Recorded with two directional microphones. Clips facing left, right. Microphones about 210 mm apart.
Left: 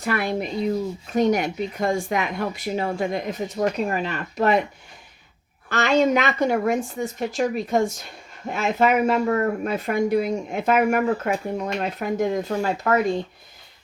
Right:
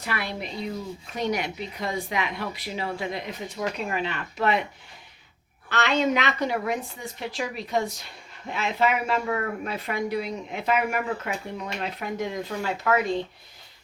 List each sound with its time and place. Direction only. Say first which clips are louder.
0.0 s speech: left 8 dB; 50° left (ahead or behind)
5.6 s speech: left 5 dB; 45° left (ahead or behind)